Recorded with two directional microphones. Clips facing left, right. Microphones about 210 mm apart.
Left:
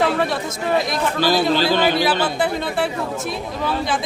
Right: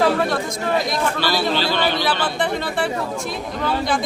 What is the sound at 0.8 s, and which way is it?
Speech, centre (ahead or behind).